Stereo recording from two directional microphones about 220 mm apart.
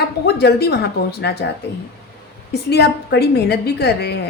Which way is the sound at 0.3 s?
45° left (ahead or behind).